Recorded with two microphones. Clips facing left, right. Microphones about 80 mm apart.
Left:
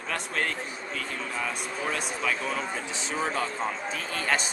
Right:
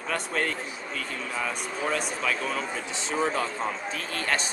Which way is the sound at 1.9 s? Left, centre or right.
Centre.